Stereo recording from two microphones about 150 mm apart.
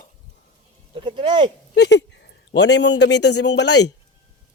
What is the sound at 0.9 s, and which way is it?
Speech, 30° right (ahead or behind).